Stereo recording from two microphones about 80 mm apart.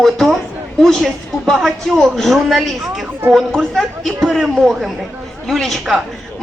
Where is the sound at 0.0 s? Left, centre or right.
Centre.